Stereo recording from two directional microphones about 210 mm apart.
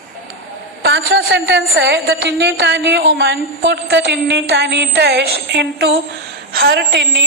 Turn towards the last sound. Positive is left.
turn(degrees=-50)  # may be behind; listen again after turning